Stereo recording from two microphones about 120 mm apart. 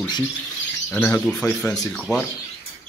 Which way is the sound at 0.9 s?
15° left (ahead or behind).